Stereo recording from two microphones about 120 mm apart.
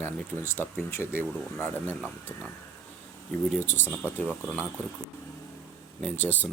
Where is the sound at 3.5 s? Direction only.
15° left (ahead or behind).